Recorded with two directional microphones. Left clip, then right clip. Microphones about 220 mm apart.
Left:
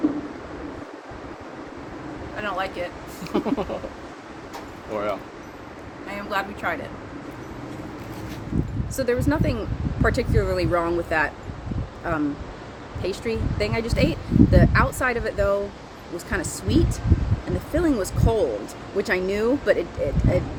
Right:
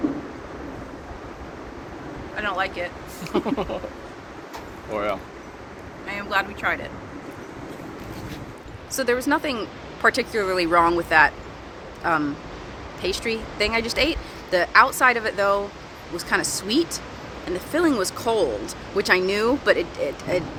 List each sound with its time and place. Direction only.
2.3 s speech: 15° left (ahead or behind)
3.3 s speech: centre (ahead or behind)
4.9 s speech: centre (ahead or behind)
6.1 s speech: 15° left (ahead or behind)
9.0 s speech: 5° left (ahead or behind)